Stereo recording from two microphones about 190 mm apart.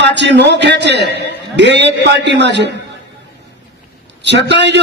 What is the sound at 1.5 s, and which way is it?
A man's voice, 65° right (ahead or behind).